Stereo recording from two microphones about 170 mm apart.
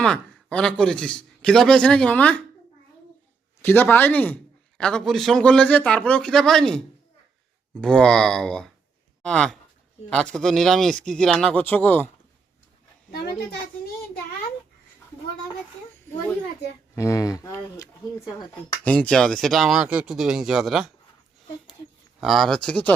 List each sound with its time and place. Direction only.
0.0 s a man's voice: 5° left (ahead or behind)
3.6 s a man's voice: 10° left (ahead or behind)
16.9 s speech: 15° left (ahead or behind)
18.9 s a man's voice: 10° left (ahead or behind)
22.2 s a man's voice: centre (ahead or behind)